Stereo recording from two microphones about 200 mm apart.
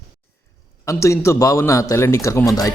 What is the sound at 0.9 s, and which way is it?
A man's voice, 15° left (ahead or behind).